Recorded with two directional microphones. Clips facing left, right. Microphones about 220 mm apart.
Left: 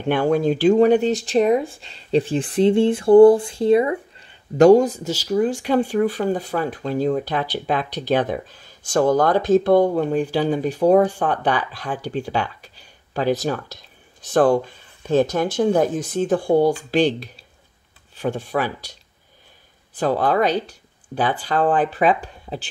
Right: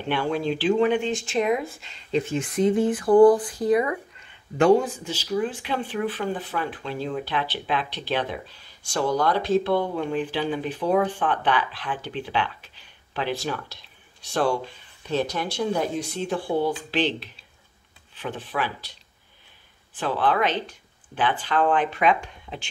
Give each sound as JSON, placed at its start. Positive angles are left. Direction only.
{"t": 0.1, "sound": "speech", "side_deg": 45}
{"t": 18.4, "sound": "speech", "side_deg": 45}
{"t": 20.0, "sound": "speech", "side_deg": 40}